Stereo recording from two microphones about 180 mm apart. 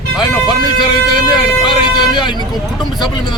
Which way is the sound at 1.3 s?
25° left (ahead or behind).